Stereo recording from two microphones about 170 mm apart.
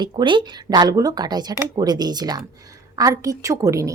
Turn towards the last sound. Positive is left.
turn(degrees=-20)  # may be behind; listen again after turning